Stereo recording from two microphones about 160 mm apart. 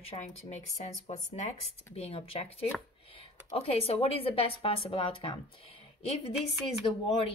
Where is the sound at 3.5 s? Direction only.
35° left (ahead or behind).